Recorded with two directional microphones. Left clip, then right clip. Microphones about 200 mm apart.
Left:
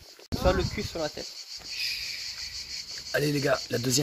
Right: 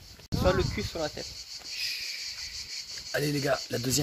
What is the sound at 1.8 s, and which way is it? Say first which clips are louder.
Cricket: left 2 dB; centre (ahead or behind).